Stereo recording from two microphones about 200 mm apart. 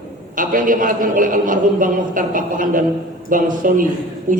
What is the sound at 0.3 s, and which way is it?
A man's voice, 40° right (ahead or behind).